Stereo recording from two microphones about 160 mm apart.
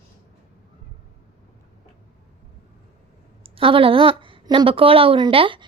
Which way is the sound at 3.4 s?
35° right (ahead or behind).